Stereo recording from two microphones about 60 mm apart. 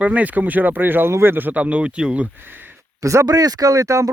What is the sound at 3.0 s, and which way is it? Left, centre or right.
Speech, right.